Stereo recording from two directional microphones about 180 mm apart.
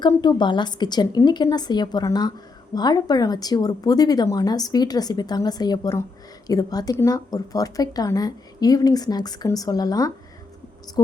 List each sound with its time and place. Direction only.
0.0 s speech: 25° left (ahead or behind)